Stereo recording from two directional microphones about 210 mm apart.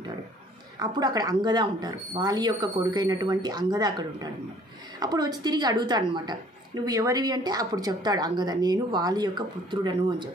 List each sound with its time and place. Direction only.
0.7 s a woman's voice: 20° right (ahead or behind)